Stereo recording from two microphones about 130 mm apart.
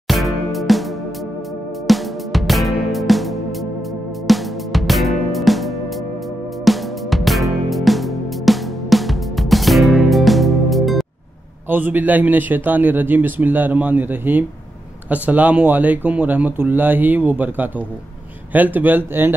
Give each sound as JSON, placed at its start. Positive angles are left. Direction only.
{"t": 0.1, "sound": "music", "side_deg": 0}
{"t": 1.9, "sound": "music", "side_deg": 0}
{"t": 11.7, "sound": "speech", "side_deg": -15}